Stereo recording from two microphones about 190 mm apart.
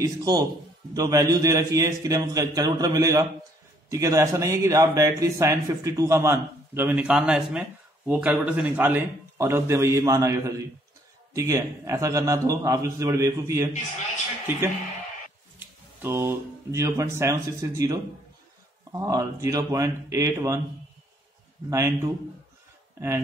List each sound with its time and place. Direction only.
0.0 s a man's voice: 20° right (ahead or behind)
16.0 s a man's voice: 15° right (ahead or behind)
21.6 s a man's voice: 15° right (ahead or behind)